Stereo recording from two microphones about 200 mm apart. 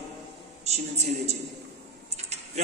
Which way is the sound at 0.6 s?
35° right (ahead or behind).